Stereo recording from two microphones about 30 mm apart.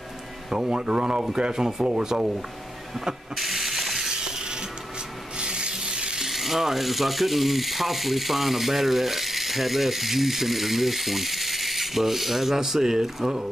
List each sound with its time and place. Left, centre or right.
0.5 s speech: right
3.3 s mechanisms: centre
4.1 s a sound: right
5.4 s rub: right
6.2 s speech: centre